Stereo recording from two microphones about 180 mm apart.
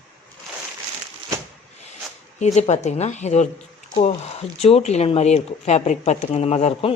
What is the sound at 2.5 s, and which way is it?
Speech, 40° left (ahead or behind).